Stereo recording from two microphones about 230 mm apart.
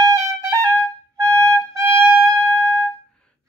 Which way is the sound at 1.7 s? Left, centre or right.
Centre.